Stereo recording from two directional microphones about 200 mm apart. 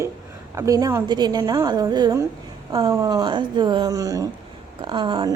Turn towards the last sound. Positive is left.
turn(degrees=-20)  # may be behind; listen again after turning